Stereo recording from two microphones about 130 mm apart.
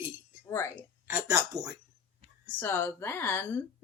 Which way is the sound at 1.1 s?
25° right (ahead or behind).